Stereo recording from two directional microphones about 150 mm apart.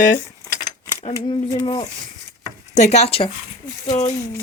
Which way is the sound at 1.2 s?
30° left (ahead or behind).